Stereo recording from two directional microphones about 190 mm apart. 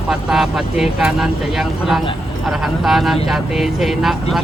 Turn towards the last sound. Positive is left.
turn(degrees=0)  # may be behind; listen again after turning